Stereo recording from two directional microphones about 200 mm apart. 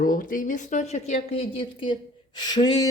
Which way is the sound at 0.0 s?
45° left (ahead or behind).